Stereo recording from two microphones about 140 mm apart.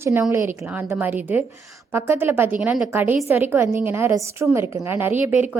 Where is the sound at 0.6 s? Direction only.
10° right (ahead or behind).